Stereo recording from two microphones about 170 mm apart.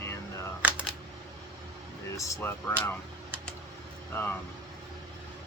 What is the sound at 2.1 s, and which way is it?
Speech, 20° left (ahead or behind).